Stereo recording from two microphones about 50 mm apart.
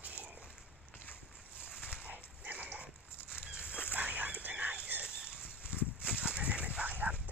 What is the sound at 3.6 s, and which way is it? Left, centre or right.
Dog, left.